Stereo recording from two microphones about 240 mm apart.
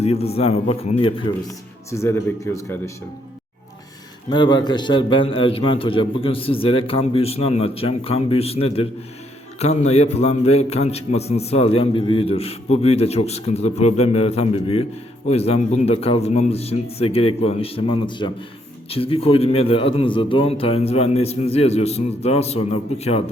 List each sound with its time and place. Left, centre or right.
0.0 s a man's voice: left
1.9 s speech: centre
4.3 s a man's voice: centre